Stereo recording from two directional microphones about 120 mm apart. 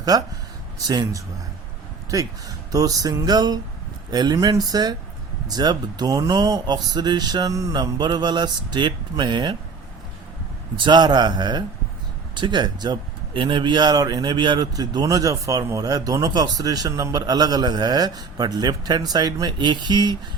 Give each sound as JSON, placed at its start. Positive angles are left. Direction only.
{"t": 0.1, "sound": "speech", "side_deg": -30}
{"t": 10.8, "sound": "speech", "side_deg": -35}